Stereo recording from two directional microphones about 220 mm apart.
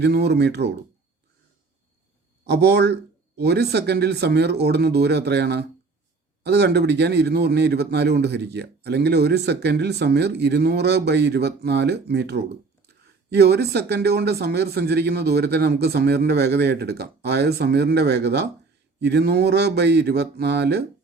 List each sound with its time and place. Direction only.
0.0 s a man's voice: 50° right (ahead or behind)
2.5 s a man's voice: 50° right (ahead or behind)